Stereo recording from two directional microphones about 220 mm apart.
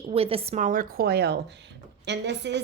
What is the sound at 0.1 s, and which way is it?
A woman's voice, 25° right (ahead or behind).